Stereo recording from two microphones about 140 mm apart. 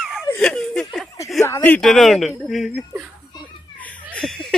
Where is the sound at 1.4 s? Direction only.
15° left (ahead or behind); by 2.8 s centre (ahead or behind).